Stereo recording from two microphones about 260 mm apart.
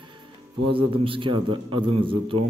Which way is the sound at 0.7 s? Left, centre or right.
Right.